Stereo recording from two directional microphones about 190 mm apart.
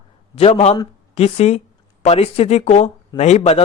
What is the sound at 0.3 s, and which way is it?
Speech, 35° left (ahead or behind).